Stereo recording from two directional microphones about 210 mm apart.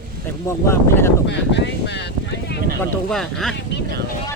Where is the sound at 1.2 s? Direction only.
55° left (ahead or behind).